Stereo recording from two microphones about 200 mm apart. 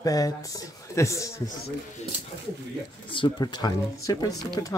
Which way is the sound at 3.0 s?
25° left (ahead or behind).